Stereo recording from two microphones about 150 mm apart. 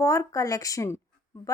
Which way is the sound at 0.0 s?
20° left (ahead or behind).